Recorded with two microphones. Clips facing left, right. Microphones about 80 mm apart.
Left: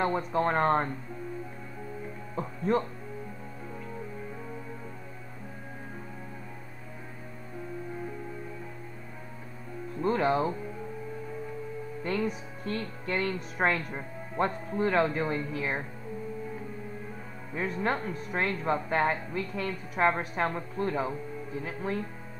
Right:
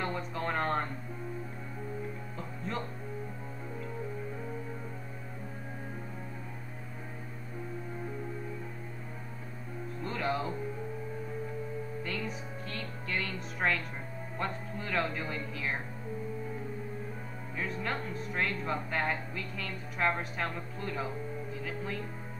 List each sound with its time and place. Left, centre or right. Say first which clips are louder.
0.0 s speech: left 8 dB; left
2.3 s music: left 13 dB; left
10.0 s speech: left 8 dB; left
12.6 s speech: left 9 dB; left
17.6 s speech: left 6 dB; left